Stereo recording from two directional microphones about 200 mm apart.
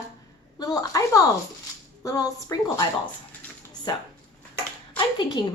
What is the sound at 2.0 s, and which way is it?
Speech, 15° left (ahead or behind).